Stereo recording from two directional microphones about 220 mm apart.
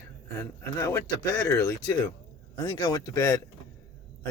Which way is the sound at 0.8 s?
15° left (ahead or behind).